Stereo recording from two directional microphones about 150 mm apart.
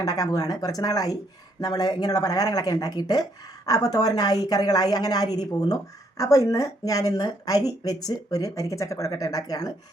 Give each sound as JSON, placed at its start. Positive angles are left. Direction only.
{"t": 0.0, "sound": "a woman's voice", "side_deg": 25}